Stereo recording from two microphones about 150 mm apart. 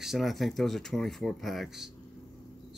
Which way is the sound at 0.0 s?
Centre (ahead or behind).